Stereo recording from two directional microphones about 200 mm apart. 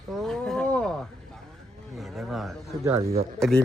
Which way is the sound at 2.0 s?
Centre (ahead or behind).